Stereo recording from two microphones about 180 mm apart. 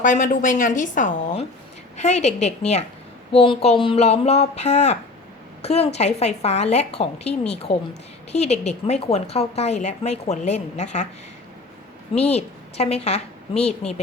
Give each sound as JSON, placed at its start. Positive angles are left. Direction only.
{"t": 0.0, "sound": "a woman's voice", "side_deg": 45}
{"t": 12.3, "sound": "a woman's voice", "side_deg": 35}